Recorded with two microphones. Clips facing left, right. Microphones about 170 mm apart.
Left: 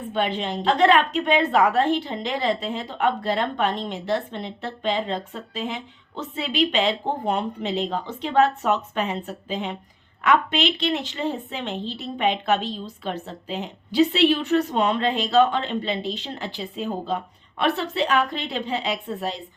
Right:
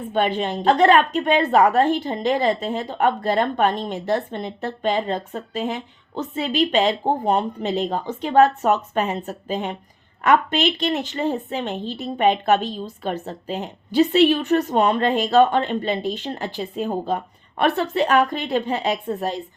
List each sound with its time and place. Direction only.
0.1 s a woman's voice: 45° right (ahead or behind)